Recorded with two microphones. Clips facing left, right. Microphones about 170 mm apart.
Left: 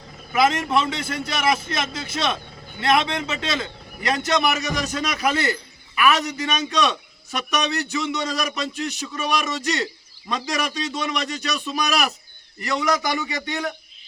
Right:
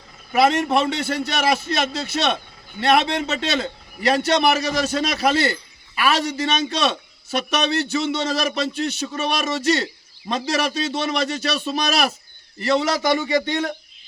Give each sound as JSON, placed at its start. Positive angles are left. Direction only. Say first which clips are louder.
{"t": 0.3, "sound": "a man's voice", "louder": "right 2 dB", "side_deg": -30}